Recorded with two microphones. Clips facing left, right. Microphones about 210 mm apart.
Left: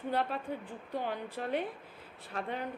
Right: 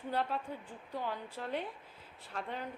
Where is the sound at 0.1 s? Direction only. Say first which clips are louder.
Left 2 dB; 65° left (ahead or behind).